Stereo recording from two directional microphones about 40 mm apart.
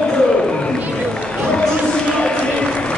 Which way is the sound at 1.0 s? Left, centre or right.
Left.